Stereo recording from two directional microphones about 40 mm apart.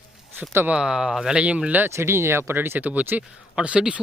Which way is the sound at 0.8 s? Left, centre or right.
Right.